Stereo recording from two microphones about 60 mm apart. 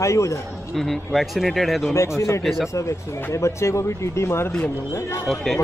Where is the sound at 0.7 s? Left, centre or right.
Centre.